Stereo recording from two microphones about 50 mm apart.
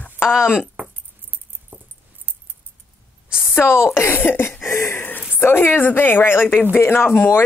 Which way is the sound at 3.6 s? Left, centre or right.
Left.